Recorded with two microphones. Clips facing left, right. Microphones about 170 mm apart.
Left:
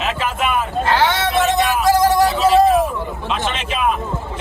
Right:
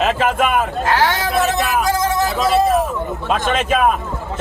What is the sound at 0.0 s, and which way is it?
Speech, 45° right (ahead or behind).